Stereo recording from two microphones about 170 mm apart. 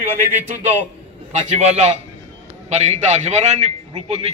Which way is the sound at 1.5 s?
40° right (ahead or behind).